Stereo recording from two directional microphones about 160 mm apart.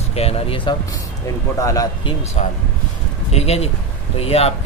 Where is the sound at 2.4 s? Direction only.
45° left (ahead or behind).